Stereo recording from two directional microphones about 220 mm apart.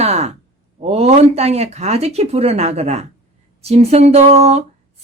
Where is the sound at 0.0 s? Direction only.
30° right (ahead or behind).